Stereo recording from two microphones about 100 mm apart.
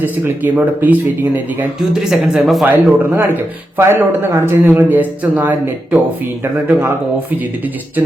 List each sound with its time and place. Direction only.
0.0 s a man's voice: 20° right (ahead or behind)
1.8 s speech: 5° right (ahead or behind)
2.6 s a man's voice: 20° right (ahead or behind)